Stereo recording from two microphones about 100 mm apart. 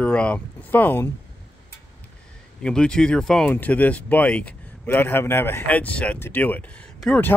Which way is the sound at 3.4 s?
15° left (ahead or behind).